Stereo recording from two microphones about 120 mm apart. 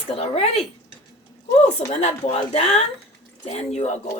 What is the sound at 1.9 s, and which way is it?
Speech, 70° left (ahead or behind).